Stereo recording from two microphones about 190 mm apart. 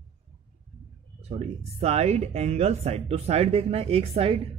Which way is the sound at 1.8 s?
35° right (ahead or behind).